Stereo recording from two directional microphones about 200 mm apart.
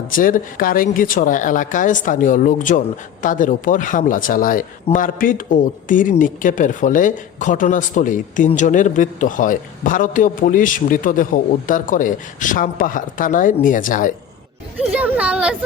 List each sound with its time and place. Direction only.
0.1 s speech: 45° left (ahead or behind)
14.8 s speech: 5° right (ahead or behind)